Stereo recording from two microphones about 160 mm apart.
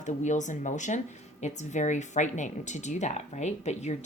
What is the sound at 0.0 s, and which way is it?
Speech, 50° left (ahead or behind).